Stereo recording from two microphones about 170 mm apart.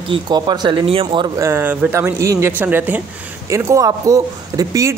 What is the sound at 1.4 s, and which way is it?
Speech, 15° right (ahead or behind).